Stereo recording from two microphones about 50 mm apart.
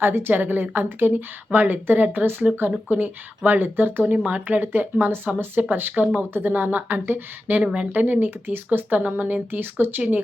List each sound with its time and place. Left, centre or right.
0.0 s a woman's voice: right
4.1 s a woman's voice: right
7.6 s speech: right
7.9 s speech: right